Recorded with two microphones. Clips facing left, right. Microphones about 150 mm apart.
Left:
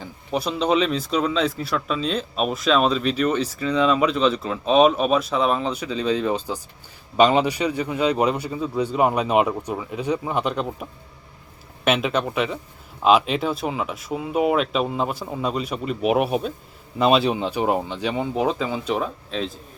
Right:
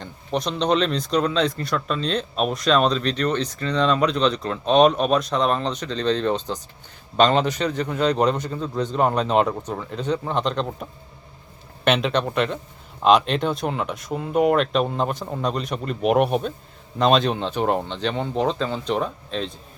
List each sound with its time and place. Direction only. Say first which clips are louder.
0.0 s a man's voice: even; 5° left (ahead or behind)
11.9 s a man's voice: right 1 dB; 5° left (ahead or behind)